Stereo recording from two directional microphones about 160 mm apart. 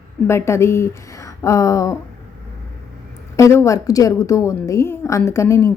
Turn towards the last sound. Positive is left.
turn(degrees=20)  # may be behind; listen again after turning